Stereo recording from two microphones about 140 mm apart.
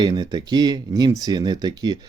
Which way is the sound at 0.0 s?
30° right (ahead or behind).